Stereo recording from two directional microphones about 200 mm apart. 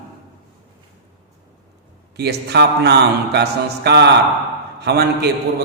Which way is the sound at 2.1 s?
55° right (ahead or behind).